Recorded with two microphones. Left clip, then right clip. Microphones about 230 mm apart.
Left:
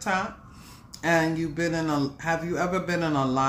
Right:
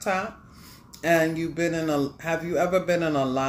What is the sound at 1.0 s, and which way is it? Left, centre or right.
Speech, centre.